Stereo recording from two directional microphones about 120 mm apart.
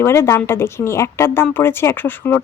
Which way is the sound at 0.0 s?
20° left (ahead or behind).